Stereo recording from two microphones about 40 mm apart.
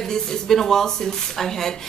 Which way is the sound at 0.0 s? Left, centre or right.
Centre.